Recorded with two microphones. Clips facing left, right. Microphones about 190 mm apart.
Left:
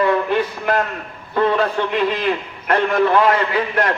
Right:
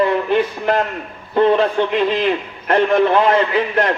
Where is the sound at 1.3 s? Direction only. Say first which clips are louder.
Right 4 dB; 25° right (ahead or behind).